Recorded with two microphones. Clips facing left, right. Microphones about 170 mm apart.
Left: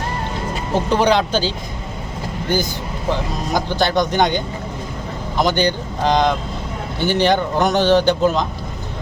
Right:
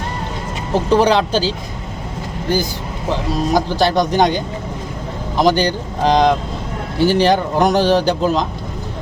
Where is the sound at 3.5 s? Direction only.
5° right (ahead or behind).